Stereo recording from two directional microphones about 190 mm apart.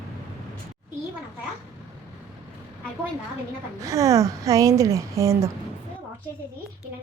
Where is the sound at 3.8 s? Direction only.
15° right (ahead or behind).